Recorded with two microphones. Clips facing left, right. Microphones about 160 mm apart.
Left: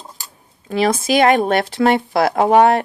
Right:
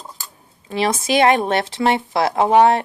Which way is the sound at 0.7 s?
50° left (ahead or behind).